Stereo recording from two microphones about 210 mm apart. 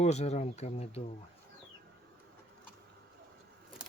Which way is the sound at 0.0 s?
30° left (ahead or behind).